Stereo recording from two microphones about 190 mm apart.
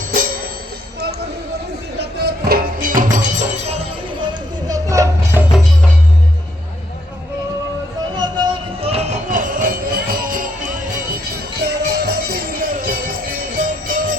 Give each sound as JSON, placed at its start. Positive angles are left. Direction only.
{"t": 2.0, "sound": "music", "side_deg": -55}
{"t": 4.7, "sound": "music", "side_deg": -15}
{"t": 8.2, "sound": "music", "side_deg": -25}
{"t": 11.6, "sound": "music", "side_deg": -55}